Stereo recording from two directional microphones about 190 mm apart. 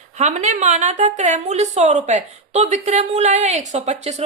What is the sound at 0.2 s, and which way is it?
A woman's voice, 35° right (ahead or behind).